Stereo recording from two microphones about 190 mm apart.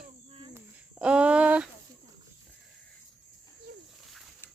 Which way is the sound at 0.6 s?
5° right (ahead or behind).